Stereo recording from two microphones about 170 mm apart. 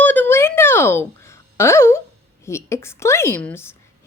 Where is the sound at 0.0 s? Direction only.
10° left (ahead or behind).